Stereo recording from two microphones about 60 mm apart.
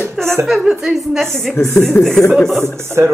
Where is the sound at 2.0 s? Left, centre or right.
Left.